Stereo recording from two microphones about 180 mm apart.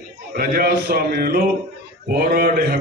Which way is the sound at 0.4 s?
60° right (ahead or behind).